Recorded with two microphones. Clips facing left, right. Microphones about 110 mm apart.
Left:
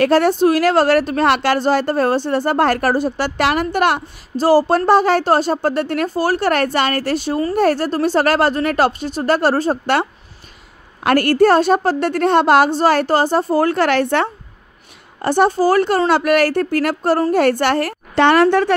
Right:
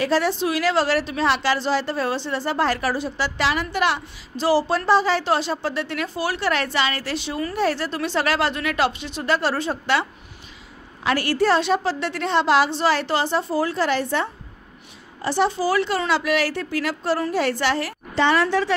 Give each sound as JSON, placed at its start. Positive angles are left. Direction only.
{"t": 0.0, "sound": "speech", "side_deg": 55}
{"t": 11.1, "sound": "speech", "side_deg": 50}
{"t": 15.2, "sound": "a woman's voice", "side_deg": 55}